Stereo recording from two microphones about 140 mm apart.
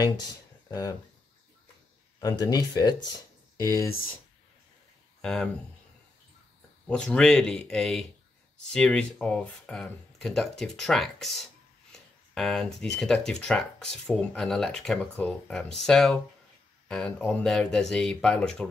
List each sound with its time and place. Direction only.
0.7 s speech: 25° left (ahead or behind)
2.1 s speech: 25° left (ahead or behind)
5.2 s speech: 5° left (ahead or behind)
6.9 s speech: 5° left (ahead or behind)